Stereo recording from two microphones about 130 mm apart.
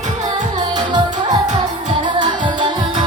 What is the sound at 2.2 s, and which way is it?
Music, 35° right (ahead or behind).